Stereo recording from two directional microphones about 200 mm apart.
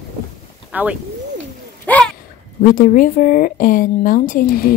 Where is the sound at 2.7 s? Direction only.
40° left (ahead or behind).